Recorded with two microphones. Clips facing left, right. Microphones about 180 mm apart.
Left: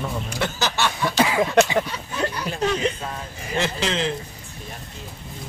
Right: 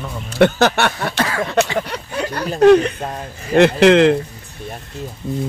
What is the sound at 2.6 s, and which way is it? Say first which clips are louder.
Speech: right 13 dB; 60° right (ahead or behind).